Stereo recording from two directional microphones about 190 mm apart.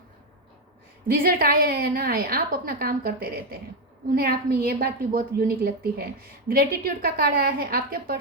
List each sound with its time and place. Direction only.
1.0 s a woman's voice: 50° right (ahead or behind)